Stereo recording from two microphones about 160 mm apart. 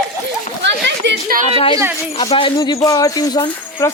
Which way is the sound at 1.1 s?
65° right (ahead or behind).